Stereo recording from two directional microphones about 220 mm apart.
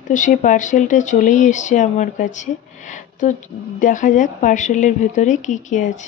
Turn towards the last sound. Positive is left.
turn(degrees=35)  # may be behind; listen again after turning